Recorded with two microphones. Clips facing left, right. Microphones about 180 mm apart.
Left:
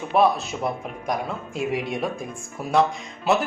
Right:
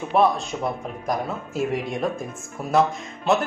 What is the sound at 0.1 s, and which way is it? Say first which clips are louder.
A woman's voice: even; centre (ahead or behind).